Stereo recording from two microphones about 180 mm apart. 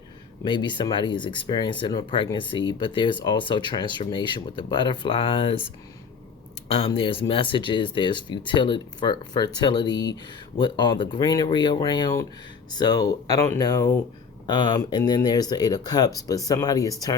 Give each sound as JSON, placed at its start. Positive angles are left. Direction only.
{"t": 0.4, "sound": "speech", "side_deg": 25}